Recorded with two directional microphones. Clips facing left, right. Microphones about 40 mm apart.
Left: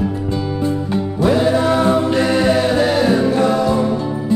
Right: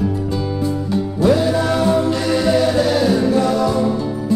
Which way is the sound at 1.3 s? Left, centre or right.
Left.